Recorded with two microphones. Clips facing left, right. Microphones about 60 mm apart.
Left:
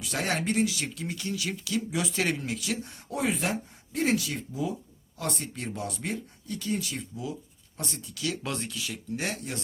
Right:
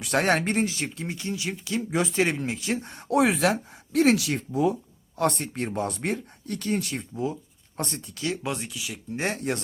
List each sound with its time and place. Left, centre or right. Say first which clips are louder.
0.0 s speech: right 7 dB; right
3.1 s speech: right 8 dB; right
8.1 s speech: right 2 dB; right
8.4 s speech: right 2 dB; centre
9.1 s speech: right 4 dB; right